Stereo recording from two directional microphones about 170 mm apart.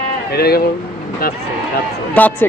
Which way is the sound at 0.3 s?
70° left (ahead or behind).